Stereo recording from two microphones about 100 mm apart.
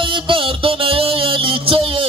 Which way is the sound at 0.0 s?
60° right (ahead or behind).